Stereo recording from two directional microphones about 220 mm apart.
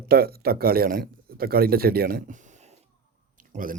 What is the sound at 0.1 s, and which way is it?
A man's voice, 45° right (ahead or behind).